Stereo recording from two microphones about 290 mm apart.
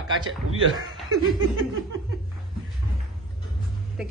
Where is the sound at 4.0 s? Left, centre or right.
Centre.